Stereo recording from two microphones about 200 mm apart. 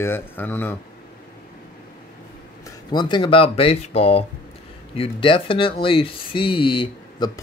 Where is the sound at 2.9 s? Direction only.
20° left (ahead or behind).